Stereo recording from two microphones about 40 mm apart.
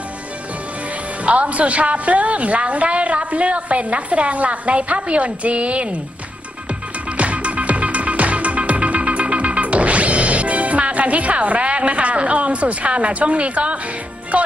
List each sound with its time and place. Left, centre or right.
1.2 s a woman's voice: right
7.2 s music: right